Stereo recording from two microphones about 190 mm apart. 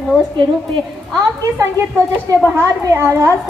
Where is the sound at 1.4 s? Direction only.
15° right (ahead or behind).